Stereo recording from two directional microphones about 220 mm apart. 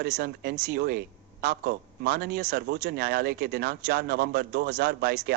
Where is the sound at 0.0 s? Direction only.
45° right (ahead or behind).